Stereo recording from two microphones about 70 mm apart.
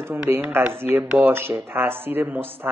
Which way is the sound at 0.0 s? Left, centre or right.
Right.